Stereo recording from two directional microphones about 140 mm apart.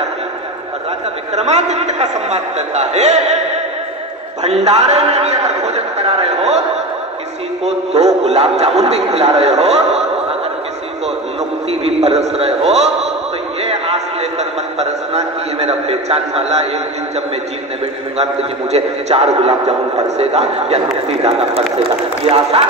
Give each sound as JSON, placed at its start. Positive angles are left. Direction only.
{"t": 1.3, "sound": "a man's voice", "side_deg": -55}
{"t": 4.4, "sound": "a man's voice", "side_deg": -50}
{"t": 7.6, "sound": "a man's voice", "side_deg": -50}
{"t": 11.7, "sound": "a man's voice", "side_deg": -50}
{"t": 13.6, "sound": "a sound", "side_deg": -45}
{"t": 14.8, "sound": "a man's voice", "side_deg": -50}
{"t": 18.1, "sound": "a man's voice", "side_deg": -50}